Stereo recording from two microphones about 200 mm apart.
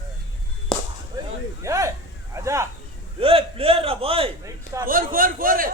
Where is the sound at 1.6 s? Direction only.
15° right (ahead or behind).